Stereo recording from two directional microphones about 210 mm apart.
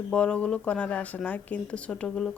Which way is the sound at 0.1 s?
5° left (ahead or behind).